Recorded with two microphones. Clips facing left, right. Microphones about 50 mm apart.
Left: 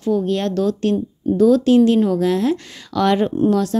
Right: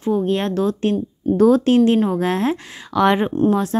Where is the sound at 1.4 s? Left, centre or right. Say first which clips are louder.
Left 1 dB; right.